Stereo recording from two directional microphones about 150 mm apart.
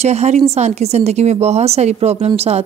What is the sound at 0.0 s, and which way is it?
A woman's voice, 50° right (ahead or behind).